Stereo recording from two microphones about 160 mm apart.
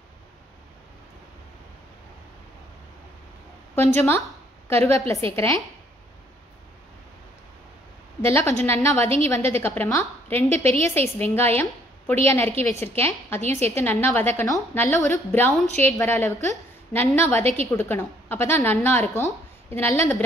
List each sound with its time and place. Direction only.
3.7 s a woman's voice: 15° left (ahead or behind)
8.2 s a woman's voice: 15° left (ahead or behind)